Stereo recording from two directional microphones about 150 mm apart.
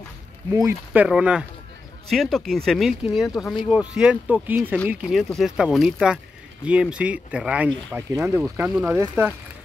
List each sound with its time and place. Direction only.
0.5 s speech: 20° right (ahead or behind)
1.0 s speech: 5° right (ahead or behind)
8.1 s speech: 20° right (ahead or behind)
8.4 s speech: 10° right (ahead or behind)